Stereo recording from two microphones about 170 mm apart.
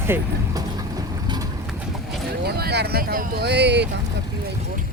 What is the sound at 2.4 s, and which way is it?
Speech, 70° right (ahead or behind).